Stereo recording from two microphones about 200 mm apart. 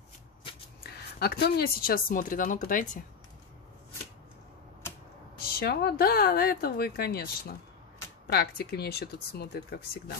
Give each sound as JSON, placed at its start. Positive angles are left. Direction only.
{"t": 0.9, "sound": "speech", "side_deg": 50}
{"t": 5.6, "sound": "speech", "side_deg": 50}